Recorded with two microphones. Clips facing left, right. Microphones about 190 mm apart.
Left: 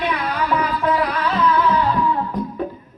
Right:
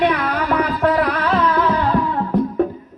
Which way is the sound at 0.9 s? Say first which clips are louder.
Right 2 dB; 50° right (ahead or behind).